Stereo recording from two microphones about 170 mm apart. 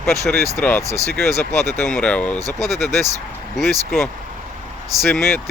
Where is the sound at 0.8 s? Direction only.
20° right (ahead or behind).